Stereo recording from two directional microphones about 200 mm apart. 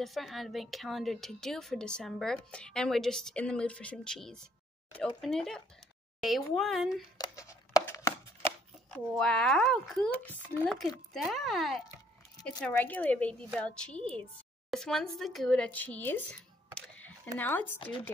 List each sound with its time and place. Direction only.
0.0 s a woman's voice: centre (ahead or behind)
7.2 s chopping: 15° left (ahead or behind)
8.9 s a woman's voice: 5° left (ahead or behind)
17.4 s speech: 10° left (ahead or behind)